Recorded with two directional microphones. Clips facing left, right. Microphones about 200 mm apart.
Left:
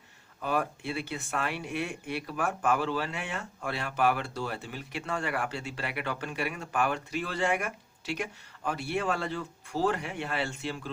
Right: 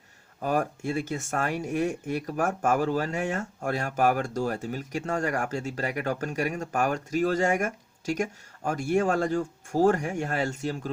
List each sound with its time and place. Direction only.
0.3 s speech: 45° right (ahead or behind)